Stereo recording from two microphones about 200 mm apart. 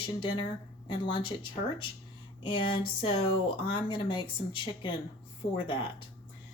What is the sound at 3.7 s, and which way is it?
A woman's voice, 25° left (ahead or behind).